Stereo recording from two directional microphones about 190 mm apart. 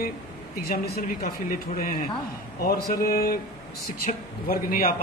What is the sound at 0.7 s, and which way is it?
A man's voice, 50° left (ahead or behind).